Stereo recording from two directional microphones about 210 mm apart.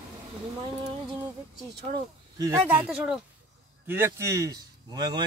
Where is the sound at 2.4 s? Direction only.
10° right (ahead or behind).